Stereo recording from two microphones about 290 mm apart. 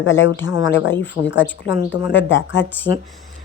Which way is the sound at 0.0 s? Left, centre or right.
Left.